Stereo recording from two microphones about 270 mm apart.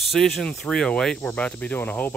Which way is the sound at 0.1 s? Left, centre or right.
Centre.